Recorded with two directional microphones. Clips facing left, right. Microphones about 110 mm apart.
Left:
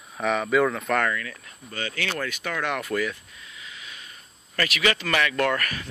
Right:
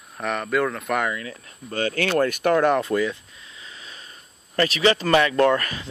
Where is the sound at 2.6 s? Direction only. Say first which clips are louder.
Right 7 dB; 30° right (ahead or behind).